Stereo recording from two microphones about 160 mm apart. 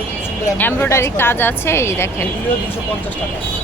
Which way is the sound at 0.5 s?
10° left (ahead or behind).